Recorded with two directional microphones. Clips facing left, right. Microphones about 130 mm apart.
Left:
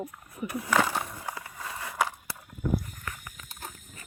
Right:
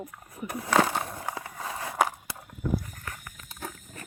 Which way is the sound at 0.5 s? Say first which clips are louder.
Right 2 dB; 40° right (ahead or behind).